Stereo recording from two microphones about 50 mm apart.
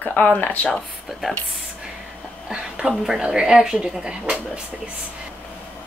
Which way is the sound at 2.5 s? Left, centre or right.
Centre.